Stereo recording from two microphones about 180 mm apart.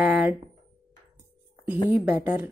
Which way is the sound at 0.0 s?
5° right (ahead or behind).